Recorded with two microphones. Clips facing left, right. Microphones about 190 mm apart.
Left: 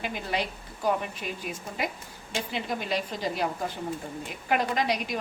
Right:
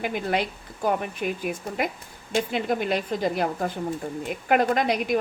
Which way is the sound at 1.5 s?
55° right (ahead or behind).